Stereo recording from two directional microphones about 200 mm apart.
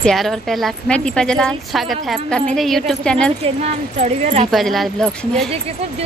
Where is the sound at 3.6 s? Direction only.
35° right (ahead or behind).